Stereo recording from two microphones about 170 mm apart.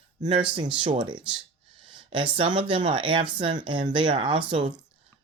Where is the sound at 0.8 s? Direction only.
30° right (ahead or behind).